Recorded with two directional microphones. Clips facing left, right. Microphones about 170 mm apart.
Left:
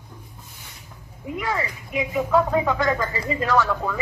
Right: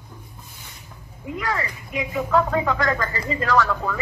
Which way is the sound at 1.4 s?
25° left (ahead or behind).